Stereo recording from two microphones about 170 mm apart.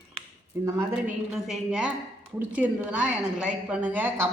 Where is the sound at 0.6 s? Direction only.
15° right (ahead or behind).